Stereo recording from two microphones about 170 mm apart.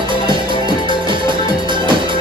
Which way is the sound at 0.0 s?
30° right (ahead or behind).